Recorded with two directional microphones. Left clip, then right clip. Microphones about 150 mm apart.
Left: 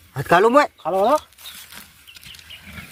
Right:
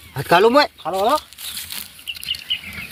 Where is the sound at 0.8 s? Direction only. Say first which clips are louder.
Left 1 dB; 75° left (ahead or behind).